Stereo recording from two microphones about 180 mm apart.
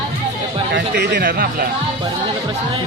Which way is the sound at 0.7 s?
70° right (ahead or behind).